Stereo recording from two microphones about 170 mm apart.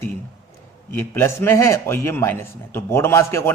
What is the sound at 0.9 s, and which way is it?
A man's voice, 15° left (ahead or behind).